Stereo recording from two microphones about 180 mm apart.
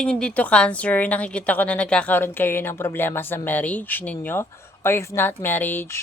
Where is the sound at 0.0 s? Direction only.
5° left (ahead or behind).